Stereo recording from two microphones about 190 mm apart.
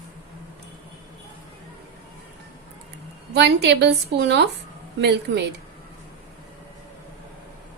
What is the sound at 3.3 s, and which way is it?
A woman's voice, 60° right (ahead or behind).